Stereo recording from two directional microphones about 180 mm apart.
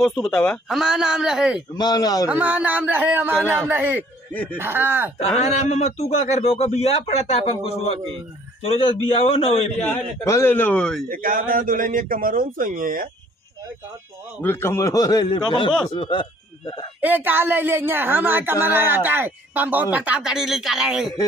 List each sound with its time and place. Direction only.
0.2 s a man's voice: 5° left (ahead or behind)
0.7 s a man's voice: 5° right (ahead or behind)
1.8 s a man's voice: 20° left (ahead or behind)
2.2 s a woman's voice: 10° right (ahead or behind)
4.3 s speech: 10° left (ahead or behind)
4.6 s a woman's voice: 10° right (ahead or behind)
5.4 s a man's voice: 40° left (ahead or behind)
9.8 s a man's voice: 15° left (ahead or behind)
11.1 s a man's voice: 50° right (ahead or behind)
14.4 s a man's voice: 10° left (ahead or behind)
17.0 s a woman's voice: 10° right (ahead or behind)